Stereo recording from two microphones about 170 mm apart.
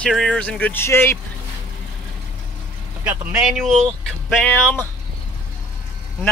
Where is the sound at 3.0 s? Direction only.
10° right (ahead or behind); by 4.8 s 10° left (ahead or behind).